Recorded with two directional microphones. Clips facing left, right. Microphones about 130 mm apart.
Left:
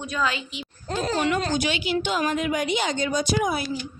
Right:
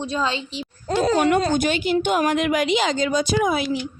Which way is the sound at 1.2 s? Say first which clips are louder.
Right 5 dB; 50° right (ahead or behind).